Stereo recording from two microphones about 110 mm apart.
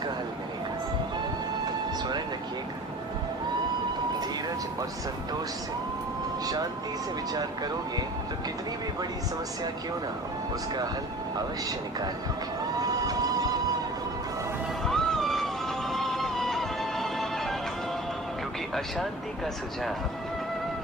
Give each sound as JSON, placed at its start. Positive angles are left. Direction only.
{"t": 6.4, "sound": "speech", "side_deg": -35}
{"t": 12.8, "sound": "train", "side_deg": -35}
{"t": 14.8, "sound": "music", "side_deg": 5}